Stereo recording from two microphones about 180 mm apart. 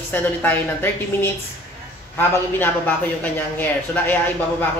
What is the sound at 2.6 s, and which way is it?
A woman's voice, 10° left (ahead or behind).